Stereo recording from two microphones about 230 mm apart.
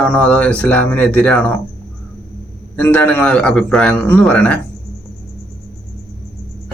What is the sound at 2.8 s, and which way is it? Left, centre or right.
Speech, centre.